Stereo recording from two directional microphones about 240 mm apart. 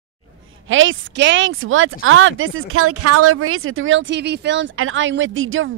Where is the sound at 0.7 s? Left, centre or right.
Right.